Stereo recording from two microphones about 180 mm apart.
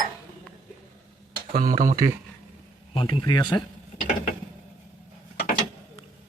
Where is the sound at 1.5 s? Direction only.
45° right (ahead or behind).